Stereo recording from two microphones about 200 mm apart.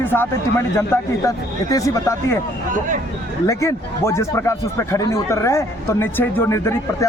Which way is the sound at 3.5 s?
15° left (ahead or behind).